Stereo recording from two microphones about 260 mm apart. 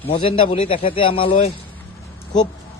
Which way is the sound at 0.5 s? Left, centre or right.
Left.